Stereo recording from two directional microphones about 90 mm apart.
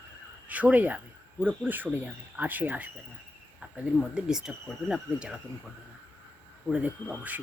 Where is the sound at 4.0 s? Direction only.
10° right (ahead or behind).